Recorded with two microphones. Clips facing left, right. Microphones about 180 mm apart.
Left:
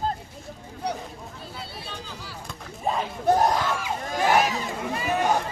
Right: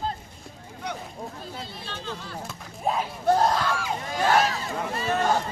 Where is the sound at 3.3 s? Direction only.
20° left (ahead or behind).